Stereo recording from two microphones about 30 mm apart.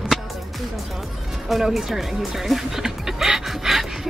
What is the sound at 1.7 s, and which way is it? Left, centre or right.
Speech, centre.